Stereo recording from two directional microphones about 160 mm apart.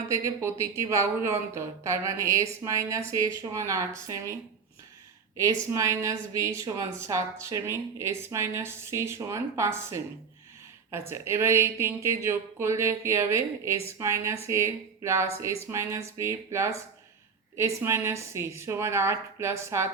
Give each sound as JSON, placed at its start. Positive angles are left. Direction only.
{"t": 0.1, "sound": "speech", "side_deg": -15}
{"t": 5.4, "sound": "a woman's voice", "side_deg": -20}